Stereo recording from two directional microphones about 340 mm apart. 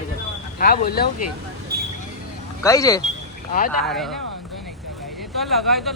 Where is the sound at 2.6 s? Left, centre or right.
Centre.